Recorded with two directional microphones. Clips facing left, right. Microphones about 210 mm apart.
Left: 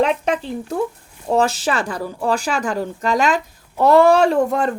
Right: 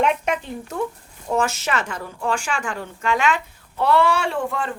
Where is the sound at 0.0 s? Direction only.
35° left (ahead or behind).